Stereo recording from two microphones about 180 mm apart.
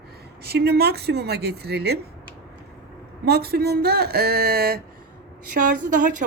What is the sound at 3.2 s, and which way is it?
A woman's voice, 60° right (ahead or behind).